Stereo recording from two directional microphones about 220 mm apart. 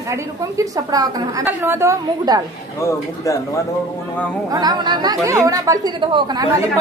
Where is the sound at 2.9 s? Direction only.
15° left (ahead or behind).